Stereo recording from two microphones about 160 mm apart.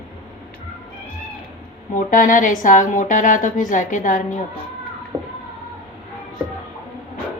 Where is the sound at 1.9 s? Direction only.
55° left (ahead or behind).